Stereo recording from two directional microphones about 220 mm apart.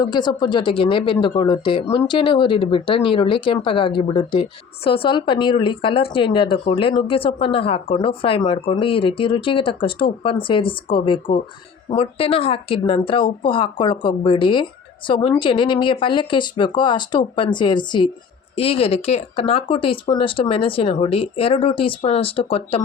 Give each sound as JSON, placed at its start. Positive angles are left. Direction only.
{"t": 0.1, "sound": "speech", "side_deg": 20}